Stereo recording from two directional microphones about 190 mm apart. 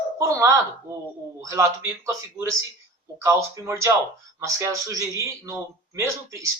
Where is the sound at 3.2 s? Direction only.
15° right (ahead or behind).